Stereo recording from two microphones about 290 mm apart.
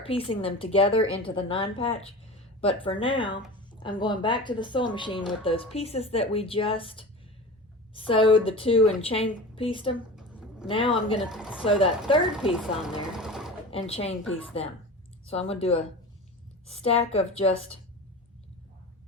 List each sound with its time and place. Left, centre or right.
0.0 s a woman's voice: centre
11.2 s a woman's voice: centre
11.8 s speech: centre
12.4 s speech: centre
13.7 s a woman's voice: centre